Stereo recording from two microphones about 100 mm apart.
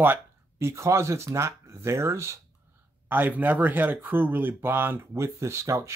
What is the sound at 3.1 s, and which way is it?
Speech, 15° right (ahead or behind).